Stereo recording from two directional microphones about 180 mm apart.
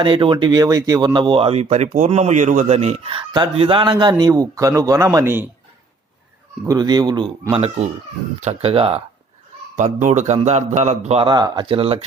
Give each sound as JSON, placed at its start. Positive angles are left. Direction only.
{"t": 0.0, "sound": "speech", "side_deg": -30}
{"t": 6.7, "sound": "a man's voice", "side_deg": -20}
{"t": 9.7, "sound": "a man's voice", "side_deg": -40}